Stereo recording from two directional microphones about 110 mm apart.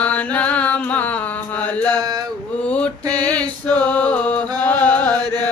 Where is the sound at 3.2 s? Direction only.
15° left (ahead or behind).